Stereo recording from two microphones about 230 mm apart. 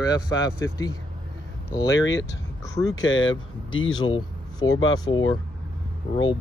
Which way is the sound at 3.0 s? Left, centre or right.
Left.